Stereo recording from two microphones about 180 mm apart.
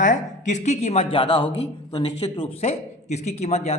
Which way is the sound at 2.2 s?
35° left (ahead or behind).